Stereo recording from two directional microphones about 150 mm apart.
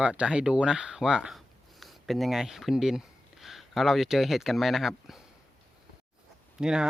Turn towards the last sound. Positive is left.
turn(degrees=-5)  # may be behind; listen again after turning